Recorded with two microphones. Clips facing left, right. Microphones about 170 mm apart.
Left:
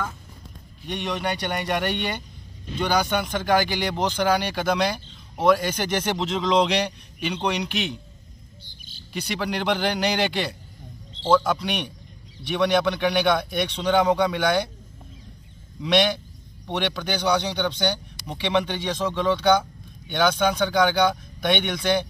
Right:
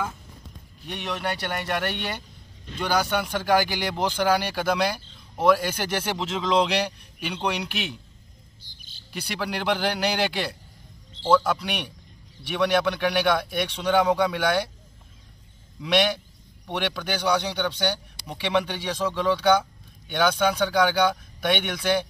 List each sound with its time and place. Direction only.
0.8 s a man's voice: 5° right (ahead or behind)
9.1 s a man's voice: 5° right (ahead or behind)
15.8 s a man's voice: 5° right (ahead or behind)